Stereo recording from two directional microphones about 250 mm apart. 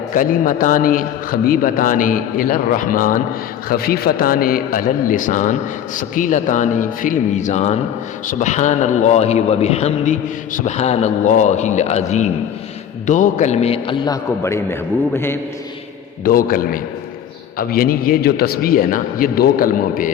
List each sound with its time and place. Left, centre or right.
0.1 s a man's voice: left; by 15.4 s centre
16.2 s a man's voice: left